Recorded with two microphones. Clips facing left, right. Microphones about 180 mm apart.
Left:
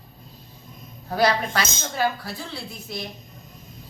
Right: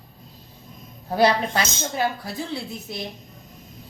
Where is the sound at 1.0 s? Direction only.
20° right (ahead or behind).